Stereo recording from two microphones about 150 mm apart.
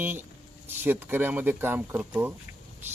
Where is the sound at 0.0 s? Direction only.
10° right (ahead or behind).